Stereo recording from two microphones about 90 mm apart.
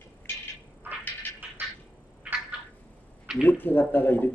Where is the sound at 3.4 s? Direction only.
20° left (ahead or behind).